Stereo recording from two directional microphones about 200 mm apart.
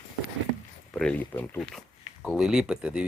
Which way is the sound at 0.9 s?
5° left (ahead or behind).